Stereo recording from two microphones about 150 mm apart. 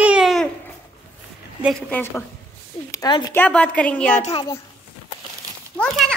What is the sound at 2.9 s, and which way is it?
Speech, 25° left (ahead or behind).